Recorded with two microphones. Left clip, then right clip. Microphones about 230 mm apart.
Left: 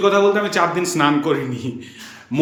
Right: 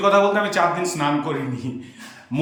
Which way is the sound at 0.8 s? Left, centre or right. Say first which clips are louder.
Left 4 dB; centre.